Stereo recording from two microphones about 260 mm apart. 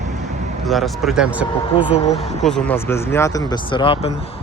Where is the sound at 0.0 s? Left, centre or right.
Right.